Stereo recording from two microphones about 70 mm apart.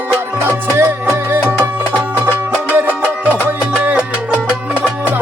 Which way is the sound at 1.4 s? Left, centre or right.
Right.